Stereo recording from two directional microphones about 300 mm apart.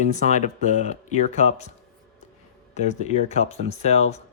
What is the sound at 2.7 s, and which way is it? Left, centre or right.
Speech, left.